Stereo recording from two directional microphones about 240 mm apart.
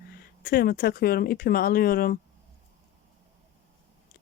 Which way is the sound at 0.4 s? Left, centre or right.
Left.